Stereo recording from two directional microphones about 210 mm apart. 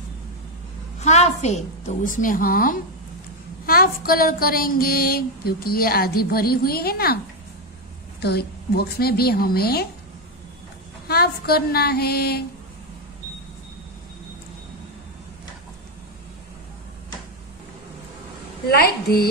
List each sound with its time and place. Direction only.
1.0 s a woman's voice: 30° left (ahead or behind); by 7.2 s 45° left (ahead or behind)
8.2 s speech: 50° left (ahead or behind)
11.1 s speech: 50° left (ahead or behind)
18.7 s speech: 45° left (ahead or behind)